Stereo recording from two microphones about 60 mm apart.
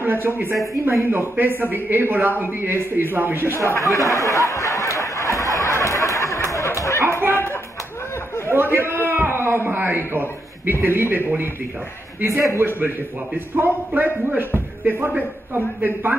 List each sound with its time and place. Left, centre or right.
0.0 s a man's voice: right
3.5 s speech: left
3.8 s snicker: left
7.0 s a sound: right
9.0 s a man's voice: right
12.3 s a man's voice: right
13.6 s a man's voice: right